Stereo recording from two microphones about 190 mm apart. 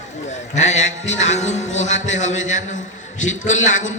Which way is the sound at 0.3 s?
40° left (ahead or behind).